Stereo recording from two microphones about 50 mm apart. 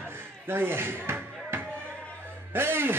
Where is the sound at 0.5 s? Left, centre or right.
Right.